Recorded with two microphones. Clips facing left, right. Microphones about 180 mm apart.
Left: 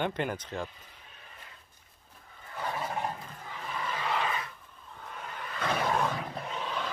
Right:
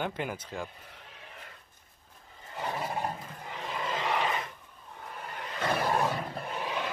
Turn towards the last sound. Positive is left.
turn(degrees=-10)  # may be behind; listen again after turning